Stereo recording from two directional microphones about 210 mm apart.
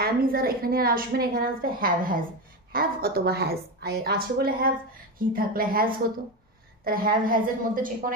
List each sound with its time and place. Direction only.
0.0 s a woman's voice: 45° right (ahead or behind)